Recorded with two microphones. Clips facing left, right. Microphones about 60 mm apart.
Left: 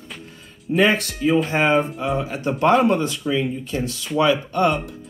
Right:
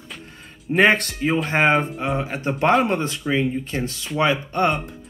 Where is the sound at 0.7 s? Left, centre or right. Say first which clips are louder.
Right 1 dB; right.